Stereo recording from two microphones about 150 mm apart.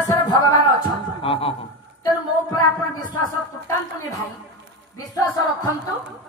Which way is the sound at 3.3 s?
20° left (ahead or behind).